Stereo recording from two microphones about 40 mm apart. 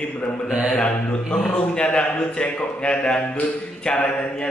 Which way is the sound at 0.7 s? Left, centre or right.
Left.